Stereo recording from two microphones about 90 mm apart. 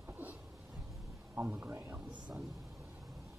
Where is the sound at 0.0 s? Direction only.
20° right (ahead or behind).